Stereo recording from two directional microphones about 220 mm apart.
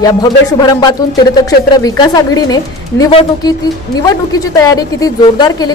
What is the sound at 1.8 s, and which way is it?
A woman's voice, 15° left (ahead or behind).